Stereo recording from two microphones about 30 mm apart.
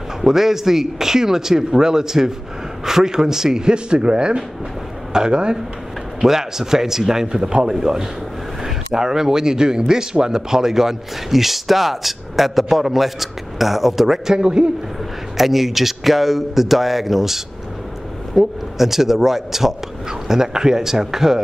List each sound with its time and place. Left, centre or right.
0.2 s a man's voice: centre; by 5.6 s right
6.2 s a man's voice: centre
14.2 s speech: right
15.3 s a man's voice: centre